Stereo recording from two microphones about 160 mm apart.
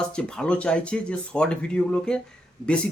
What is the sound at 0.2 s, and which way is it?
Speech, 5° left (ahead or behind).